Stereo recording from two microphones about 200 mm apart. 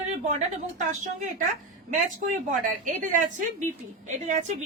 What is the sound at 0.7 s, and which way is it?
Speech, 35° right (ahead or behind).